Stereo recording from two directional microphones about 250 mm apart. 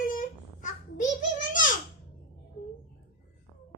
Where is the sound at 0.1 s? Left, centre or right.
Left.